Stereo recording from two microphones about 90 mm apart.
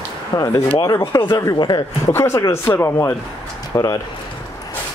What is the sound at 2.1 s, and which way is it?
Speech, 30° left (ahead or behind).